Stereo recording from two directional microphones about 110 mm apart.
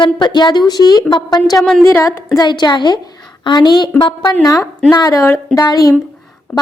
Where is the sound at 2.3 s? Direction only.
40° left (ahead or behind).